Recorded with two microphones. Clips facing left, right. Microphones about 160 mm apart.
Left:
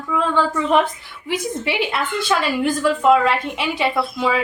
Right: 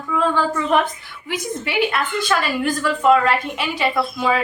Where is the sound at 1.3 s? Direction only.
25° left (ahead or behind).